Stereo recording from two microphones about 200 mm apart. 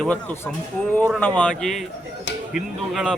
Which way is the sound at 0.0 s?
5° left (ahead or behind).